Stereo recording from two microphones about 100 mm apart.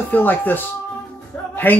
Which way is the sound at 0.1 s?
20° left (ahead or behind).